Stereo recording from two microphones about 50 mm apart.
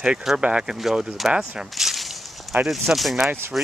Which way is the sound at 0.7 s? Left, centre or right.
Centre.